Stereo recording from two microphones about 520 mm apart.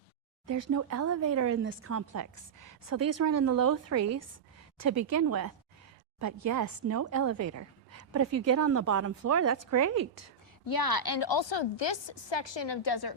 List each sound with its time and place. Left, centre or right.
0.4 s speech: right
10.7 s a woman's voice: left